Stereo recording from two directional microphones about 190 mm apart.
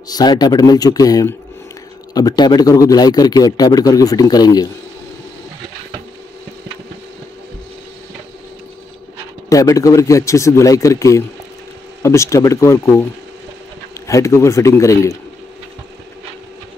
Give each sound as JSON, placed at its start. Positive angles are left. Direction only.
{"t": 0.1, "sound": "a man's voice", "side_deg": 20}
{"t": 9.5, "sound": "a man's voice", "side_deg": 15}
{"t": 14.0, "sound": "a man's voice", "side_deg": 15}